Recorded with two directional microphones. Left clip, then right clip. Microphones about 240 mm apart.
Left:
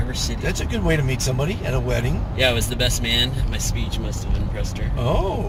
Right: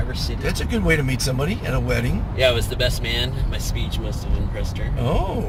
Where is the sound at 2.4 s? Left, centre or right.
Centre.